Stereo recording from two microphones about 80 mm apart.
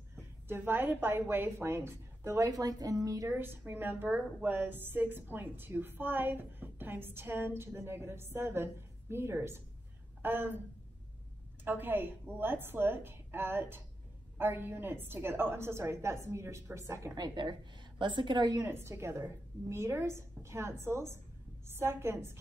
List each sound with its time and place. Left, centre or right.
0.1 s a woman's voice: right
2.4 s speech: right
3.3 s a woman's voice: right
11.6 s a woman's voice: right
17.1 s a woman's voice: right
18.7 s a woman's voice: right